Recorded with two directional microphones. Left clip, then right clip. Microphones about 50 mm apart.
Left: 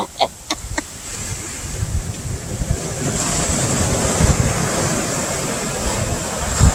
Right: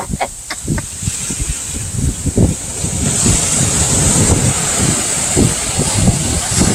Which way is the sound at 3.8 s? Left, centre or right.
Right.